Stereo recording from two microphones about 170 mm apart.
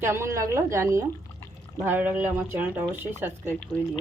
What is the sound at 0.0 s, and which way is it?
Speech, 15° right (ahead or behind).